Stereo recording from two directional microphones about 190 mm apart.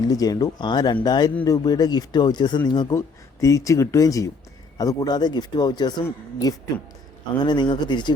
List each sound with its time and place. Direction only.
0.1 s speech: 20° left (ahead or behind)